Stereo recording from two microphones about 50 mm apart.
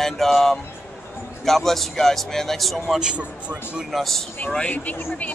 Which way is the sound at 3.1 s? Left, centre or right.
Right.